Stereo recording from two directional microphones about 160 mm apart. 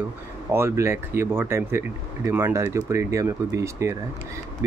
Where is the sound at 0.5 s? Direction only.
15° right (ahead or behind).